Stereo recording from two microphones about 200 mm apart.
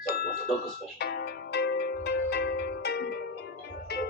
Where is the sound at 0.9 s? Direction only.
55° left (ahead or behind).